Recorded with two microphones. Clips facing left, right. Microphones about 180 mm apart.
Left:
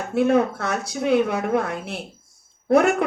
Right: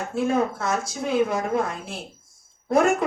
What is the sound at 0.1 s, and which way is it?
Speech, 65° left (ahead or behind).